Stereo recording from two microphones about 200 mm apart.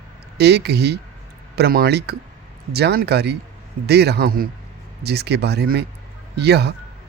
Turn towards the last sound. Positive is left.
turn(degrees=-55)  # may be behind; listen again after turning